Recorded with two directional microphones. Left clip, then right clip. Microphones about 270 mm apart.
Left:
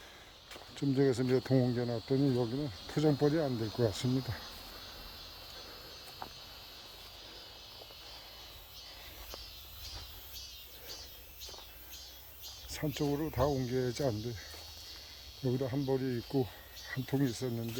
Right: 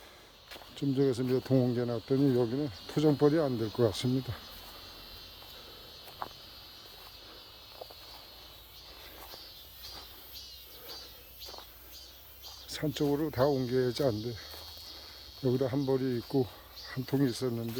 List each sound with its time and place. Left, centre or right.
0.5 s speech: centre
12.6 s speech: centre
15.4 s speech: centre